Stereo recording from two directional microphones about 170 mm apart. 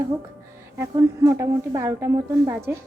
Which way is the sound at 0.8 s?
20° right (ahead or behind).